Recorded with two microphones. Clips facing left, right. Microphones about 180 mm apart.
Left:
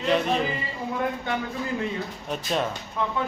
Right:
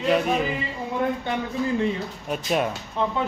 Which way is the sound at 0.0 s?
5° right (ahead or behind).